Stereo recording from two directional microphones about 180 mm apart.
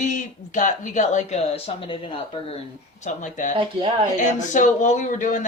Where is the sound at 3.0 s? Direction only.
40° left (ahead or behind).